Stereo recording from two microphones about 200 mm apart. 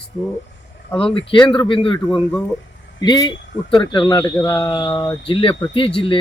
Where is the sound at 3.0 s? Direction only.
20° left (ahead or behind).